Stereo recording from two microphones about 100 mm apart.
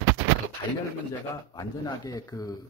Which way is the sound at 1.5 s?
40° left (ahead or behind).